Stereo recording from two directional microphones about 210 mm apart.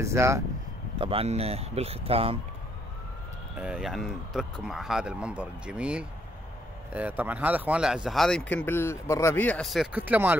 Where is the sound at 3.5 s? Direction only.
5° right (ahead or behind).